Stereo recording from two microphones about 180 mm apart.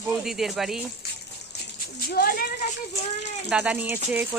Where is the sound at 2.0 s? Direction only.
55° left (ahead or behind).